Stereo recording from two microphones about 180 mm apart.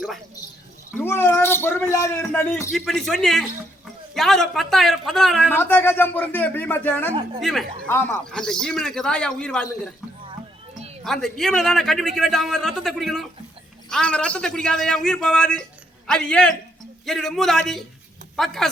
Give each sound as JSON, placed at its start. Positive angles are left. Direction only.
{"t": 0.9, "sound": "a man's voice", "side_deg": 10}
{"t": 7.9, "sound": "a man's voice", "side_deg": 10}
{"t": 11.0, "sound": "a man's voice", "side_deg": 0}